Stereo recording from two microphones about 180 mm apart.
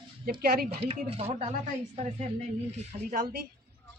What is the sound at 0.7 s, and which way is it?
Speech, 30° right (ahead or behind).